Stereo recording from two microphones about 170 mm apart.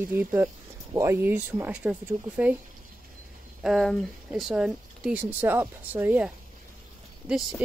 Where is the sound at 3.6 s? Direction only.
Centre (ahead or behind).